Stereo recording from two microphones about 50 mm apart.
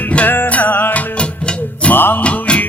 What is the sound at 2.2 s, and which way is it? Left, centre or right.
Music, left.